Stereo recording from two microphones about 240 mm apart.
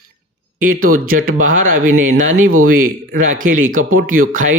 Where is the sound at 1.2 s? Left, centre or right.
Right.